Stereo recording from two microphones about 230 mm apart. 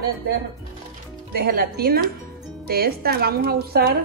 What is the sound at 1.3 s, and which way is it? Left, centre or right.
A woman's voice, right.